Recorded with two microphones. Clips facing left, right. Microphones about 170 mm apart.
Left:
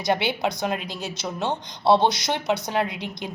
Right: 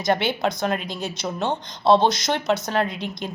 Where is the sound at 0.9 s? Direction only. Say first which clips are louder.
Right 2 dB; 55° right (ahead or behind).